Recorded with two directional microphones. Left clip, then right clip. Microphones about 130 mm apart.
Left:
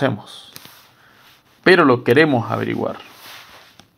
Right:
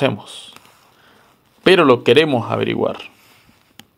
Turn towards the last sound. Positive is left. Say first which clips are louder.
# right 3 dB
turn(degrees=-40)  # may be behind; listen again after turning